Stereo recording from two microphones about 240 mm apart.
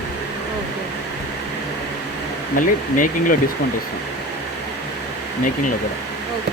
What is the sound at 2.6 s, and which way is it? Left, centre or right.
Speech, left.